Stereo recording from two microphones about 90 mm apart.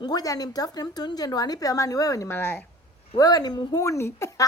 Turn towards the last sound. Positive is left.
turn(degrees=35)  # may be behind; listen again after turning